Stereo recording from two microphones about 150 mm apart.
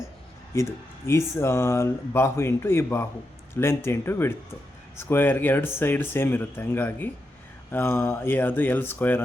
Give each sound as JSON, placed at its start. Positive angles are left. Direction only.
{"t": 0.5, "sound": "a man's voice", "side_deg": 20}